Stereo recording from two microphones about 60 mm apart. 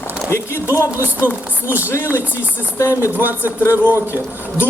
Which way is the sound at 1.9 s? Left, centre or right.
Left.